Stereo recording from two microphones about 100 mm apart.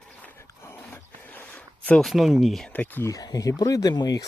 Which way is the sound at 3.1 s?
35° left (ahead or behind).